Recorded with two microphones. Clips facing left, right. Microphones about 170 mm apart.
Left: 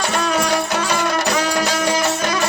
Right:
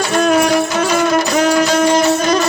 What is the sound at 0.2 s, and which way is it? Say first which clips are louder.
Music: right 9 dB; 55° right (ahead or behind).